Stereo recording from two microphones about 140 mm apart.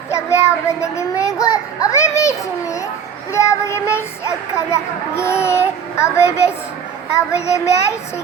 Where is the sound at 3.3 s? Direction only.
20° left (ahead or behind).